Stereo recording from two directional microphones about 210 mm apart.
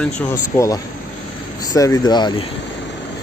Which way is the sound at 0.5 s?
15° left (ahead or behind).